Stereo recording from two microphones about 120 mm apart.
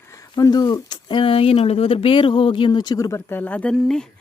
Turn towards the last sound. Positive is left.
turn(degrees=5)  # may be behind; listen again after turning